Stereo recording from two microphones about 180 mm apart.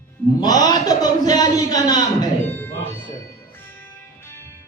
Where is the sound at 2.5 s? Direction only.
10° left (ahead or behind).